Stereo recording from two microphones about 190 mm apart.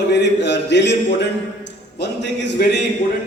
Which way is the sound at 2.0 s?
65° left (ahead or behind).